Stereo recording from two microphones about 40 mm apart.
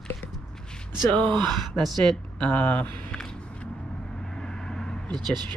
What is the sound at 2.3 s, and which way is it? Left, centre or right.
Speech, left.